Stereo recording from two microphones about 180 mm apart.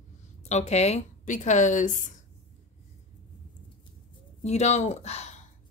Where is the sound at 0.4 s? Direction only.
40° left (ahead or behind).